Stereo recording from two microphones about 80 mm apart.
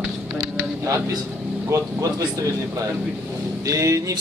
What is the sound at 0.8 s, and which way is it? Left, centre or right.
Music, right.